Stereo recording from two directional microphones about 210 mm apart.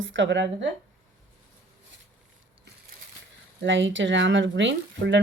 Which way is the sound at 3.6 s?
60° right (ahead or behind).